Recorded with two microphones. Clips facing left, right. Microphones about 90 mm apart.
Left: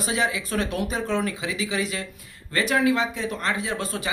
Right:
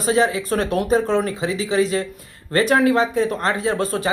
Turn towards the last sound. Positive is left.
turn(degrees=-40)  # may be behind; listen again after turning